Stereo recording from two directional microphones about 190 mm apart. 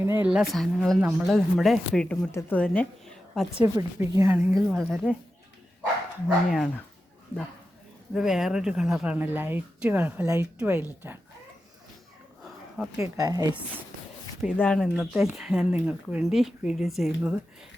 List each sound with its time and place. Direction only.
0.3 s speech: centre (ahead or behind)
3.6 s speech: 20° right (ahead or behind)
4.8 s speech: 5° left (ahead or behind)
6.2 s speech: centre (ahead or behind)
8.1 s speech: centre (ahead or behind)
12.8 s speech: centre (ahead or behind)
13.1 s a woman's voice: 20° right (ahead or behind)
14.5 s speech: 5° left (ahead or behind)